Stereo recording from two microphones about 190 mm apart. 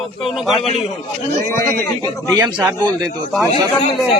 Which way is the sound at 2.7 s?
20° right (ahead or behind).